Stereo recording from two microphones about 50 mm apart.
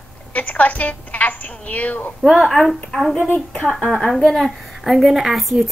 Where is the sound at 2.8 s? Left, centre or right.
Centre.